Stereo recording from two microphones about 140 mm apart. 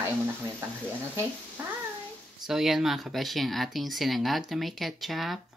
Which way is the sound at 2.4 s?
5° right (ahead or behind).